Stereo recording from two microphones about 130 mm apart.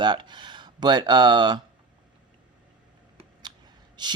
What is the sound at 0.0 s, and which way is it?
Speech, 35° right (ahead or behind).